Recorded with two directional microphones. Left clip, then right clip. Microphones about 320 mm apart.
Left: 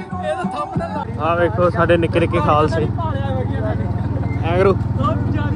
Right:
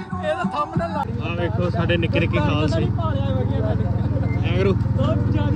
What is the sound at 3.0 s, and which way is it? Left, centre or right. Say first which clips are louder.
Vehicle: left 2 dB; left.